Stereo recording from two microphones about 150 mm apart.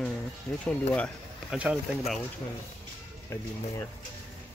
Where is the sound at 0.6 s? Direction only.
10° left (ahead or behind).